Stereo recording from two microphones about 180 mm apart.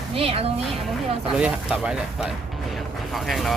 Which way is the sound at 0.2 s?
35° right (ahead or behind).